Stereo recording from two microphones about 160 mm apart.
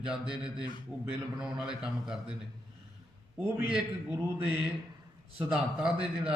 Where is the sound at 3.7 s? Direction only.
10° right (ahead or behind).